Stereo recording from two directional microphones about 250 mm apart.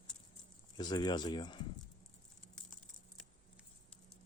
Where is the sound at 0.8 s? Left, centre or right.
Centre.